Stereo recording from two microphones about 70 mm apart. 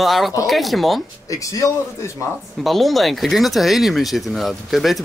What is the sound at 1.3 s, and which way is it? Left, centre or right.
Speech, left.